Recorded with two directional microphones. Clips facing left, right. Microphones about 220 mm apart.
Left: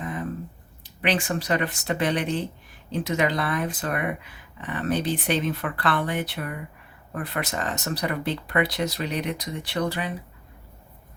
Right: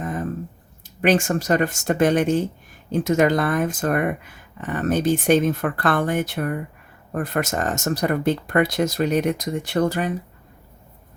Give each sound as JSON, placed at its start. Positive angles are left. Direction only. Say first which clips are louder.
{"t": 0.0, "sound": "squish", "louder": "right 4 dB", "side_deg": -45}
{"t": 1.0, "sound": "speech", "louder": "right 6 dB", "side_deg": -45}